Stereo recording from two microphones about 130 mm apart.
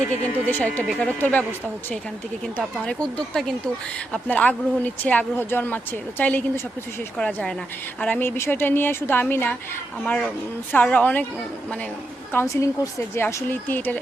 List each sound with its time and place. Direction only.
0.4 s speech: 15° left (ahead or behind)
12.3 s a woman's voice: 20° left (ahead or behind)